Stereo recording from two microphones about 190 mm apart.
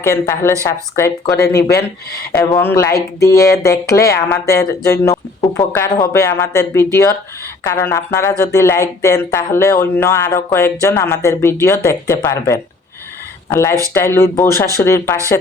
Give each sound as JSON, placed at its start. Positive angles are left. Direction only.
{"t": 0.0, "sound": "speech", "side_deg": 10}